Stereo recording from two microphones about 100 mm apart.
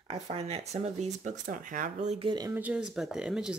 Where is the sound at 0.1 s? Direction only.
80° right.